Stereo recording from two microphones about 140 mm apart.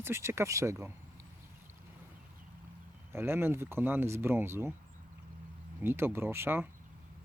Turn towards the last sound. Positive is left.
turn(degrees=-15)  # may be behind; listen again after turning